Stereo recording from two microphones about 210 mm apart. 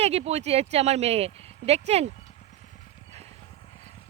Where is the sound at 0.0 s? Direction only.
30° right (ahead or behind).